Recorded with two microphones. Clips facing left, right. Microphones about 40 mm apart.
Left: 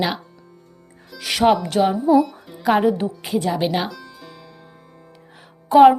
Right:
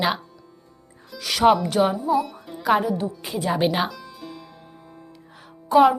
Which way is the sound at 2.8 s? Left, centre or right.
Left.